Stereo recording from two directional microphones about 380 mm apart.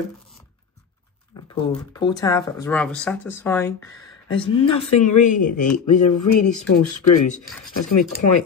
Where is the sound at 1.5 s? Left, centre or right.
Centre.